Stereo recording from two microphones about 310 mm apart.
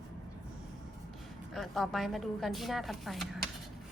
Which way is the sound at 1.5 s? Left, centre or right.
Centre.